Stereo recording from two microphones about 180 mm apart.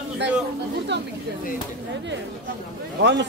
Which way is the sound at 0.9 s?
70° right (ahead or behind).